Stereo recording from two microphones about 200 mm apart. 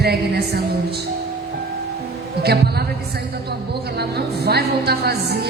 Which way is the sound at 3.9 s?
55° right (ahead or behind).